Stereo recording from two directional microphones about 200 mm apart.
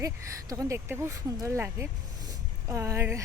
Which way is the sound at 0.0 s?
15° right (ahead or behind).